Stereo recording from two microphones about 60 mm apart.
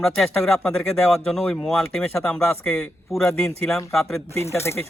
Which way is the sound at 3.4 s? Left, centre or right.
Centre.